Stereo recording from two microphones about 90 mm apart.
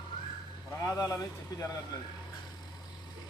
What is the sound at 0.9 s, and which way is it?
Speech, 35° left (ahead or behind).